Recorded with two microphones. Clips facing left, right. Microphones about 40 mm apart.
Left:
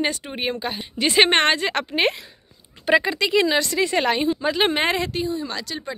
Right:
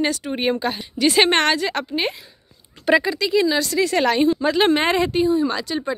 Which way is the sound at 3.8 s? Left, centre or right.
Left.